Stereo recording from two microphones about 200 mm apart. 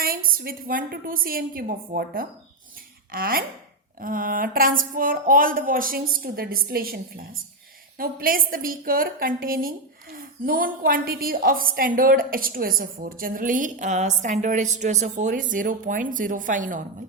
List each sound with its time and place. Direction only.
0.0 s a woman's voice: 45° right (ahead or behind)